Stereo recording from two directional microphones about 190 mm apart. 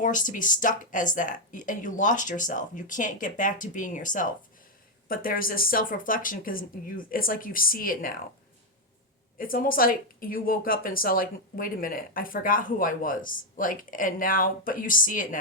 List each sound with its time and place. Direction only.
0.0 s speech: 45° left (ahead or behind)
9.4 s speech: 50° left (ahead or behind)